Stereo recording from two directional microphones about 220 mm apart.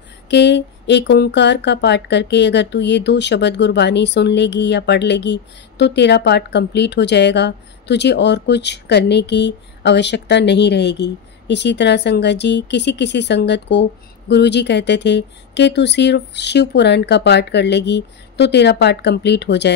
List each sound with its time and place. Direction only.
0.3 s speech: 50° left (ahead or behind)